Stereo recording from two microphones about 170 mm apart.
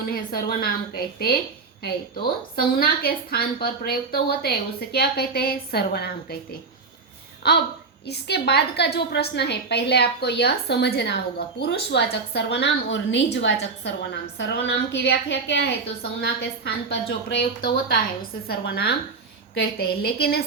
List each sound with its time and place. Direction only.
0.1 s a woman's voice: 60° left (ahead or behind)
7.4 s a woman's voice: 65° left (ahead or behind); by 15.7 s 85° left
16.2 s a woman's voice: 70° left (ahead or behind)